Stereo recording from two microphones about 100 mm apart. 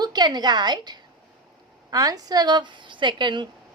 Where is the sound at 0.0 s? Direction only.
45° right (ahead or behind).